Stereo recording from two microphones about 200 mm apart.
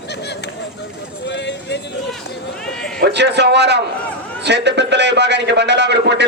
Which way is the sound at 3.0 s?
60° right (ahead or behind).